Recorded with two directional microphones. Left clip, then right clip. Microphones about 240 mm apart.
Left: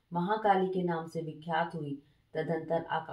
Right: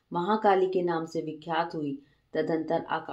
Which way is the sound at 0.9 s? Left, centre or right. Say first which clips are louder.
Right 5 dB; right.